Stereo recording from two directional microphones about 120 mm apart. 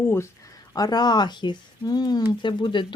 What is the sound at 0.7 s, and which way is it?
Speech, 35° left (ahead or behind).